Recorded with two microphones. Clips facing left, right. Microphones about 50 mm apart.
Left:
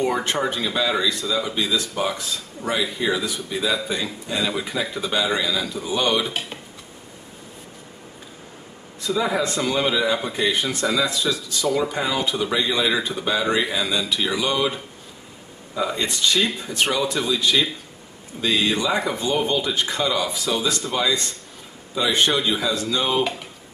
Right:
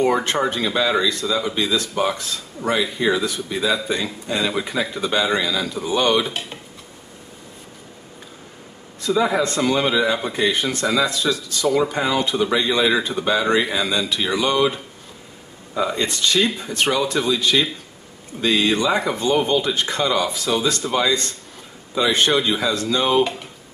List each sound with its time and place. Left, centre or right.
0.2 s a man's voice: centre
9.0 s a man's voice: centre
22.1 s a man's voice: centre